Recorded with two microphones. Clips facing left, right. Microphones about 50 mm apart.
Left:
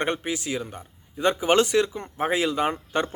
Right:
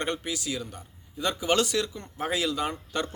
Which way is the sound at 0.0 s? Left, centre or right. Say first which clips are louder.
Left 4 dB; left.